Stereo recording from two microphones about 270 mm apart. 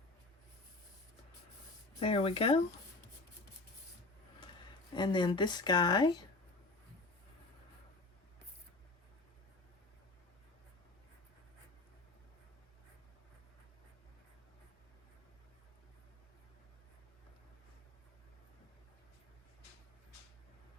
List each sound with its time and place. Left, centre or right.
2.0 s speech: left
4.9 s a woman's voice: centre